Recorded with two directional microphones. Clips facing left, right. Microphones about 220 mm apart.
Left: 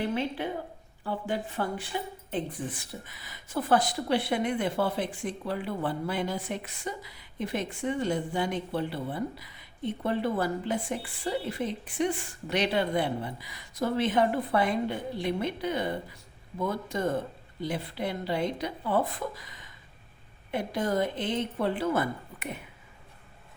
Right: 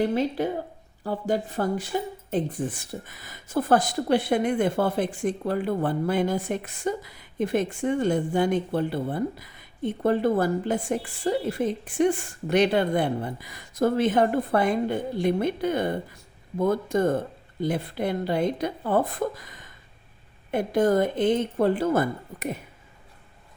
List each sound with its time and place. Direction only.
0.0 s speech: 40° right (ahead or behind)